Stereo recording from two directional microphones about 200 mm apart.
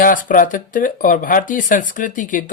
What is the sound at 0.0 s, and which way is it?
Speech, 40° left (ahead or behind).